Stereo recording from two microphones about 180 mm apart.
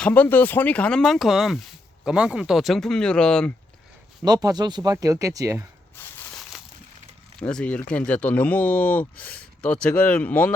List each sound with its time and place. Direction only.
0.0 s speech: 10° left (ahead or behind)
4.2 s speech: 20° right (ahead or behind)
7.3 s speech: 5° left (ahead or behind)